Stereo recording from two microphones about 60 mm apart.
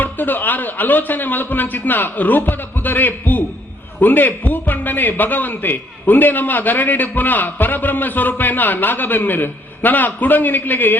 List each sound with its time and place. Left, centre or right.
0.0 s a man's voice: left